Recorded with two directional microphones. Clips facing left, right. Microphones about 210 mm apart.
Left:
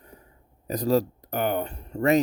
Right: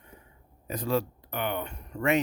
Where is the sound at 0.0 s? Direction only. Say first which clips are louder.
Left 3 dB; 40° left (ahead or behind).